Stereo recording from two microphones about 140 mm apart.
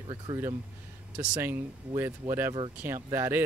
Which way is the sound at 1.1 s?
20° right (ahead or behind).